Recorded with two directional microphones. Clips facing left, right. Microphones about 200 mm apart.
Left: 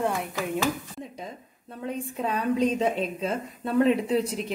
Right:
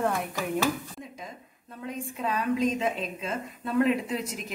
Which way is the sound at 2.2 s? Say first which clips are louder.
Left 2 dB; 30° left (ahead or behind).